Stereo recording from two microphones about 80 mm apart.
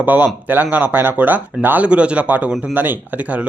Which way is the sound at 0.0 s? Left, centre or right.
Centre.